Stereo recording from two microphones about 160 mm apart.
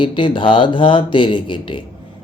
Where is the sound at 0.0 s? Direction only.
30° left (ahead or behind).